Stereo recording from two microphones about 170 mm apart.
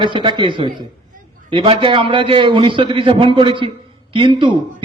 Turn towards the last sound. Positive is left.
turn(degrees=-30)  # may be behind; listen again after turning